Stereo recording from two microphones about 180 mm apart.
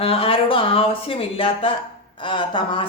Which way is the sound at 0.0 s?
30° left (ahead or behind).